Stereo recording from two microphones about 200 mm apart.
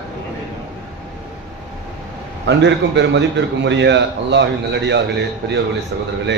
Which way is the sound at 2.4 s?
60° right (ahead or behind).